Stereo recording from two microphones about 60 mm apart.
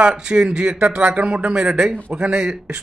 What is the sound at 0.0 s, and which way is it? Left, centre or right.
A man's voice, centre.